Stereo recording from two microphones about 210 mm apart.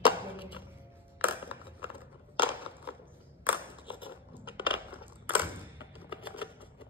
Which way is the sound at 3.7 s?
25° left (ahead or behind).